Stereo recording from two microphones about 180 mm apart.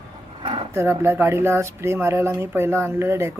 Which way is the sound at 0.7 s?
15° right (ahead or behind).